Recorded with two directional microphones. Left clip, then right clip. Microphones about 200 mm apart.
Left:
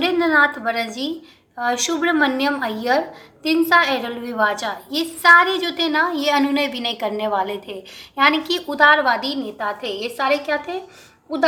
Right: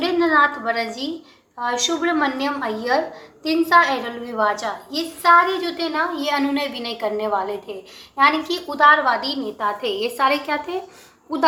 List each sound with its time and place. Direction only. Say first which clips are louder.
0.0 s a woman's voice: left 1 dB; 25° left (ahead or behind)
9.6 s a woman's voice: right 5 dB; 5° left (ahead or behind)